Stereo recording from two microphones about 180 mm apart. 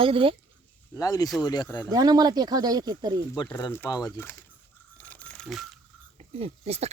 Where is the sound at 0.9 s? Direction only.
20° left (ahead or behind).